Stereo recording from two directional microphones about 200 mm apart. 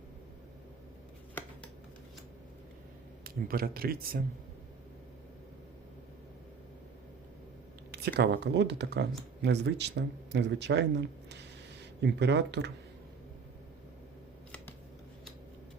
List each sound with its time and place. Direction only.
3.2 s speech: 50° right (ahead or behind)
7.9 s speech: 55° right (ahead or behind)